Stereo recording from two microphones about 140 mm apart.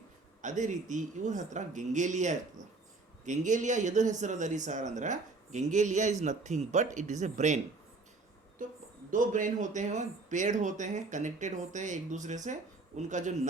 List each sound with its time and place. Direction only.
0.4 s speech: 60° right (ahead or behind)
8.6 s a woman's voice: 70° right (ahead or behind)